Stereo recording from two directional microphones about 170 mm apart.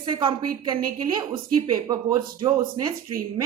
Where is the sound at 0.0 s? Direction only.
30° right (ahead or behind).